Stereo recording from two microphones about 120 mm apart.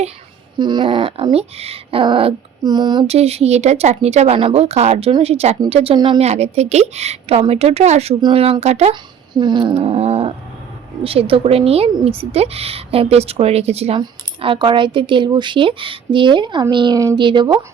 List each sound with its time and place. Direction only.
0.6 s speech: 40° right (ahead or behind)
3.1 s a woman's voice: 60° right (ahead or behind)
4.4 s a woman's voice: 55° right (ahead or behind)
6.2 s a woman's voice: 65° right (ahead or behind)
8.6 s a woman's voice: 65° right (ahead or behind)
8.9 s speech: 40° right (ahead or behind)
9.7 s a woman's voice: 55° right (ahead or behind)
14.0 s speech: 45° right (ahead or behind)